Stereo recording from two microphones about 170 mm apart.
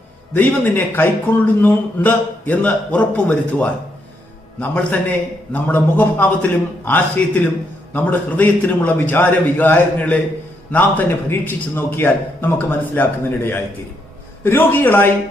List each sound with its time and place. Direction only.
0.3 s a man's voice: 10° left (ahead or behind)